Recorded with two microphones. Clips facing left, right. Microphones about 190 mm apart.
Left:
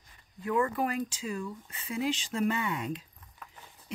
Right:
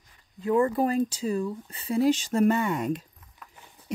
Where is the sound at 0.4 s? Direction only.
30° right (ahead or behind).